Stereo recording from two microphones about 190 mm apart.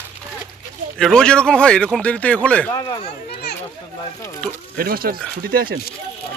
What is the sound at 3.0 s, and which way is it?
Children playing, 60° left (ahead or behind).